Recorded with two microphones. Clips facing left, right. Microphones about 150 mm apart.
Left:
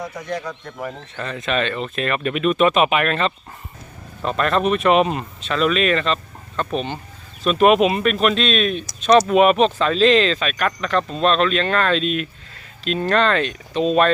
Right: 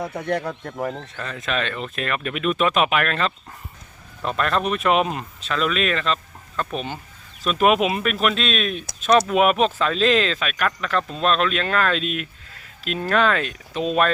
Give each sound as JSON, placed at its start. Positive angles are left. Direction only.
{"t": 0.2, "sound": "speech", "side_deg": -60}
{"t": 1.1, "sound": "speech", "side_deg": 0}